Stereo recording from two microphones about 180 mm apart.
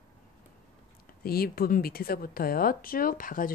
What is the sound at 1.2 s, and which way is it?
Speech, 55° left (ahead or behind).